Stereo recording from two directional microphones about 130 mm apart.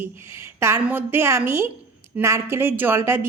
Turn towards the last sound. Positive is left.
turn(degrees=-20)  # may be behind; listen again after turning